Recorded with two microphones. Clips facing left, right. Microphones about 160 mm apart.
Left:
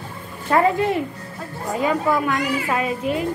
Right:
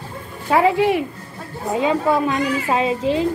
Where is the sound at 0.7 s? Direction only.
90° right.